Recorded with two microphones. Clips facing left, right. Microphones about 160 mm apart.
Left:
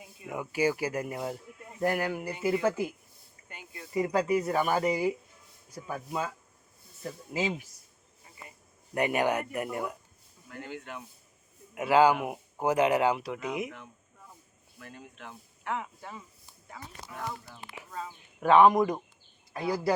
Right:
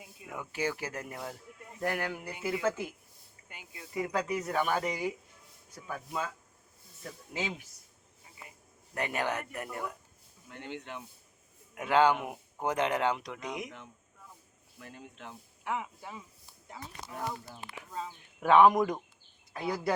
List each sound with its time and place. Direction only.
0.3 s speech: 10° left (ahead or behind)
3.5 s a sound: 10° right (ahead or behind)
3.9 s speech: 10° left (ahead or behind)
8.2 s a sound: 5° right (ahead or behind)
9.0 s speech: 15° left (ahead or behind)
10.5 s speech: 25° right (ahead or behind)
11.7 s speech: 10° left (ahead or behind)
14.8 s speech: 25° right (ahead or behind)
15.6 s speech: 10° right (ahead or behind)
16.7 s speech: 25° right (ahead or behind)
18.3 s a man's voice: centre (ahead or behind)